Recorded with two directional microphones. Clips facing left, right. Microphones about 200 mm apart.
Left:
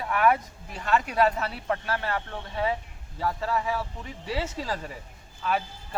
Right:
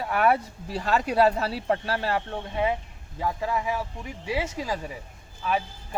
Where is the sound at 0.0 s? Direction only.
30° right (ahead or behind).